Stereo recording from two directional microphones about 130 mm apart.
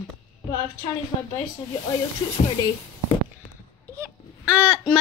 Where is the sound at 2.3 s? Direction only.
35° left (ahead or behind).